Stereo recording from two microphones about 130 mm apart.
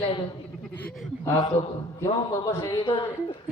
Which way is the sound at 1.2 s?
25° left (ahead or behind).